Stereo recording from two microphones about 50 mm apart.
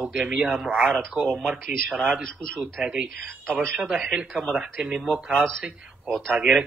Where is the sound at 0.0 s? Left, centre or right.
Centre.